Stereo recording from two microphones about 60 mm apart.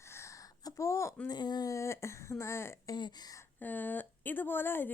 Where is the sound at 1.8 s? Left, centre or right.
Left.